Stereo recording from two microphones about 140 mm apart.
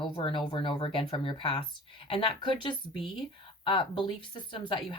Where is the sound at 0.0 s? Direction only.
35° left (ahead or behind).